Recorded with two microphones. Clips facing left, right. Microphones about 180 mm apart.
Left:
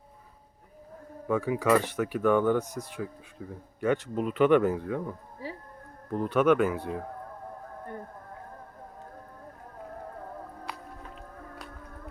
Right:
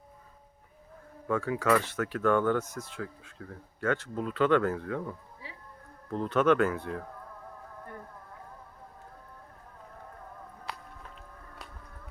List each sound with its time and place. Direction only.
1.3 s speech: 15° left (ahead or behind)
5.4 s music: 40° left (ahead or behind)
6.1 s speech: 10° left (ahead or behind)
10.7 s music: centre (ahead or behind)